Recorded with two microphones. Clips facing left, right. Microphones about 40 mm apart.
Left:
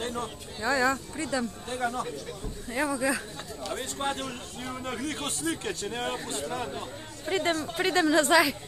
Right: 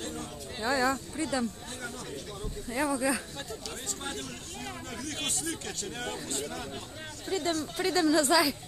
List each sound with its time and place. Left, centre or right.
0.7 s speech: centre
1.7 s a woman's voice: left
2.7 s speech: centre
3.7 s a woman's voice: left; by 6.8 s centre
7.2 s a woman's voice: left
7.5 s a woman's voice: left